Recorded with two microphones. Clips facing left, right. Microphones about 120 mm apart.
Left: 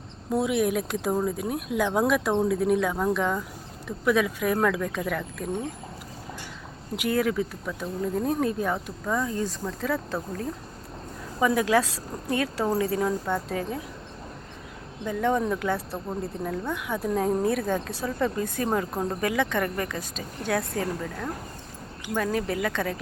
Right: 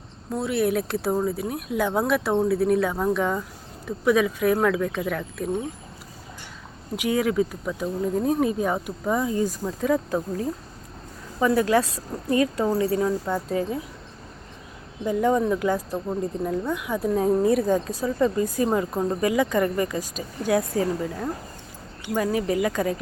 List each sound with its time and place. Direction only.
0.3 s speech: centre (ahead or behind)
6.9 s speech: centre (ahead or behind)
11.8 s speech: 90° left
12.3 s speech: centre (ahead or behind)
15.0 s speech: 5° right (ahead or behind)
22.1 s speech: 5° right (ahead or behind)